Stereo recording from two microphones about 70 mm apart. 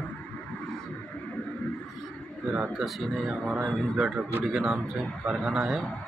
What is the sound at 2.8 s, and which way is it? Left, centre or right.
Speech, centre.